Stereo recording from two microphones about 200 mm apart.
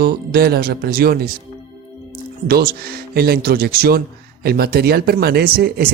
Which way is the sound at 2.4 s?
50° right (ahead or behind).